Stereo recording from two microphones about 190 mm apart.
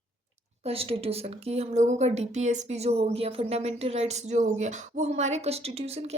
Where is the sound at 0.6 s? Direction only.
30° right (ahead or behind).